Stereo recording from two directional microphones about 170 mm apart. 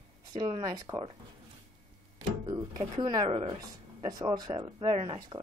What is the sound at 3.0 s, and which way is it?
Speech, 35° right (ahead or behind).